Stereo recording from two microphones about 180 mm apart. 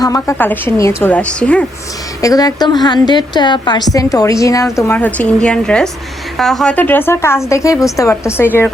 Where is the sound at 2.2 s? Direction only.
20° left (ahead or behind).